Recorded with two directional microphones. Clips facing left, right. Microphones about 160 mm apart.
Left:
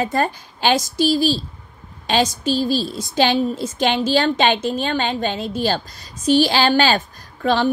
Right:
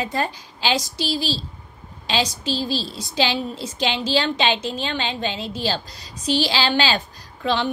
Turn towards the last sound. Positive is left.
turn(degrees=50)  # may be behind; listen again after turning